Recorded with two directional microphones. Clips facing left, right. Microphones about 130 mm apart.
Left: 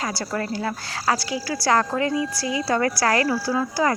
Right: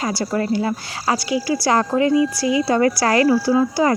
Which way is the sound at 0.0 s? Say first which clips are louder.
Right 5 dB; 15° right (ahead or behind).